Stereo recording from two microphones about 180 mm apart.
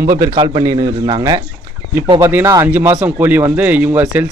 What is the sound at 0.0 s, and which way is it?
A man's voice, 15° right (ahead or behind).